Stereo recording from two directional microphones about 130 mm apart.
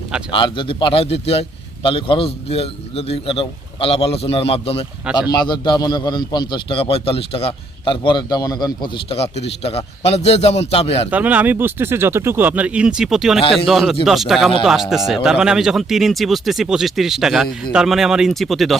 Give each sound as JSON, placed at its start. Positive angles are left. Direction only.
{"t": 0.3, "sound": "a man's voice", "side_deg": 40}
{"t": 5.1, "sound": "a man's voice", "side_deg": 35}
{"t": 9.0, "sound": "a man's voice", "side_deg": 50}
{"t": 11.1, "sound": "speech", "side_deg": -10}
{"t": 13.4, "sound": "a man's voice", "side_deg": 45}
{"t": 13.7, "sound": "speech", "side_deg": 0}